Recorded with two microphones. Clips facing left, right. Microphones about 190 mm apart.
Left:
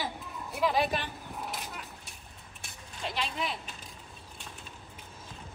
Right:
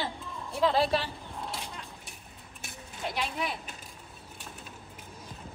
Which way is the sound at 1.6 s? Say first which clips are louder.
Even; 5° left (ahead or behind).